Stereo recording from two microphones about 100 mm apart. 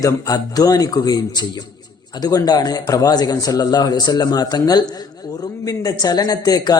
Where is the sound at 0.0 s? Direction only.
35° left (ahead or behind).